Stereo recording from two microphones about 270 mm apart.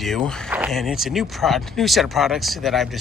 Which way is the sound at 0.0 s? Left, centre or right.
Centre.